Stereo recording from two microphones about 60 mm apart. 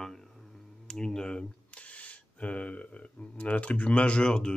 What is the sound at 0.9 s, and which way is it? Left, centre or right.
Speech, centre.